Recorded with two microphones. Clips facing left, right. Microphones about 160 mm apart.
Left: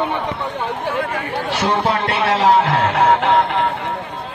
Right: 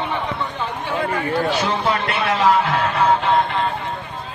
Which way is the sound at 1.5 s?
75° left (ahead or behind).